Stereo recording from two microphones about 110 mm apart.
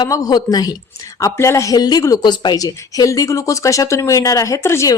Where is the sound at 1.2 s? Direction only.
25° left (ahead or behind).